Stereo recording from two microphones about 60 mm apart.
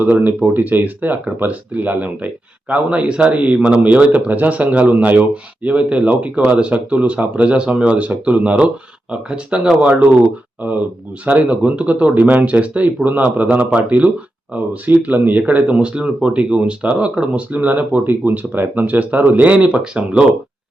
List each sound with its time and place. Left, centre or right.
0.0 s speech: right
11.3 s speech: right